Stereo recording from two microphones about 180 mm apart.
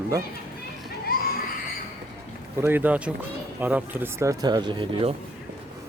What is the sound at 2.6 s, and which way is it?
Speech, 10° right (ahead or behind).